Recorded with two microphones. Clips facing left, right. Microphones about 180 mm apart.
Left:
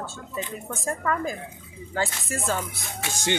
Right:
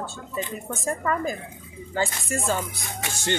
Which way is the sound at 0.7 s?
Centre (ahead or behind).